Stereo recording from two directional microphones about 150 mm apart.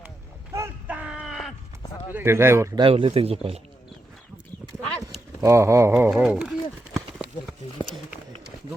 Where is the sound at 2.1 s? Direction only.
15° right (ahead or behind).